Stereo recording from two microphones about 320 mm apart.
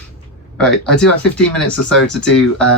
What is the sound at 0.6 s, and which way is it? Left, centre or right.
Speech, centre.